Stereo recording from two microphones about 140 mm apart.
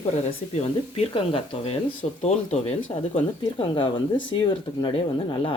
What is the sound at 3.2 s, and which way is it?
Speech, 40° left (ahead or behind).